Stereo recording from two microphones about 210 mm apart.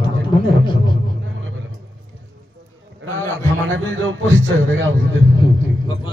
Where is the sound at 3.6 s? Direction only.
65° right (ahead or behind).